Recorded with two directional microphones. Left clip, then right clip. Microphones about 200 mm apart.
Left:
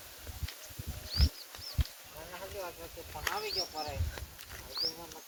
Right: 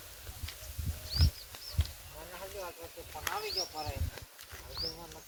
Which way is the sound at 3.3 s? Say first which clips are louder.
Left 1 dB; 5° right (ahead or behind).